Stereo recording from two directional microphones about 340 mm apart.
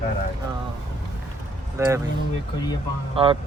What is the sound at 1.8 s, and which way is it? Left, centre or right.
Speech, centre.